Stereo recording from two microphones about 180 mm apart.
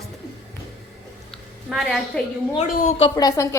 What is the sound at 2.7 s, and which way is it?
Speech, 45° left (ahead or behind).